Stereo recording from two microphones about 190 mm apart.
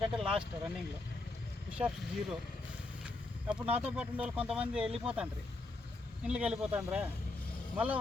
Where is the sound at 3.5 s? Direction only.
5° right (ahead or behind).